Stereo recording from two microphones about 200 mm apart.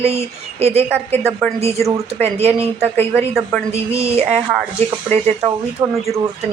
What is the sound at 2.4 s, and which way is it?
Speech, 30° right (ahead or behind).